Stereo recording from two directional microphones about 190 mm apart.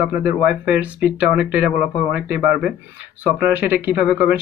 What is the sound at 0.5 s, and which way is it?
Speech, 5° right (ahead or behind).